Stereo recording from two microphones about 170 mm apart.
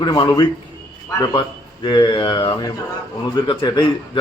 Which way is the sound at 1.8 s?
25° left (ahead or behind).